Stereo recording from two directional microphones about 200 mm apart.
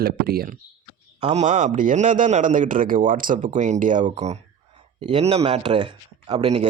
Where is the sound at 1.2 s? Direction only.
35° right (ahead or behind).